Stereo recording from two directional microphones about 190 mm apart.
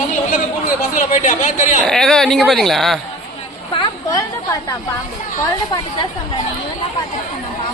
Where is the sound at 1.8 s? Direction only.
Centre (ahead or behind).